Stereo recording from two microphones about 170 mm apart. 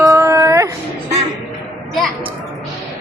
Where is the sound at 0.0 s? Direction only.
20° right (ahead or behind).